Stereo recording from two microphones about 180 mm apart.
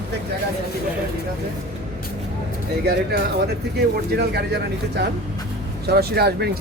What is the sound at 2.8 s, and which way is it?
Speech, 60° right (ahead or behind).